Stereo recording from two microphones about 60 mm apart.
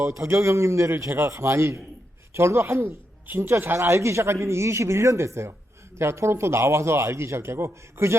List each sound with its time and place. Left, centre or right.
0.0 s a man's voice: right